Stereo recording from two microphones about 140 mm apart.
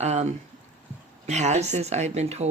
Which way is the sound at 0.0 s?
55° right (ahead or behind).